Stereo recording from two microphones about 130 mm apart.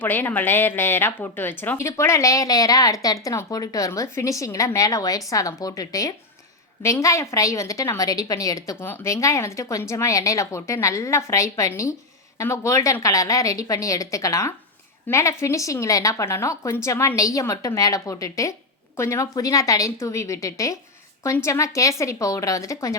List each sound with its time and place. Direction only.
0.0 s a woman's voice: 15° left (ahead or behind)